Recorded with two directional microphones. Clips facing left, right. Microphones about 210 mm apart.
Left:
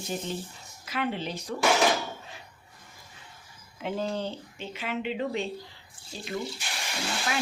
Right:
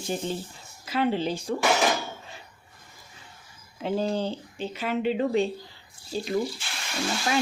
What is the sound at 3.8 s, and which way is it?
Speech, 35° right (ahead or behind).